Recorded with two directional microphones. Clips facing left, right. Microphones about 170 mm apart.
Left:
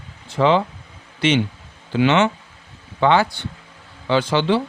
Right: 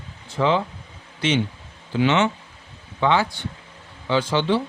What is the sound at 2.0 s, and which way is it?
A man's voice, 70° left (ahead or behind).